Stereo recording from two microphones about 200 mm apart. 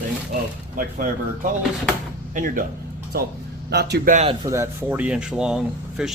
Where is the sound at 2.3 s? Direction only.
40° right (ahead or behind).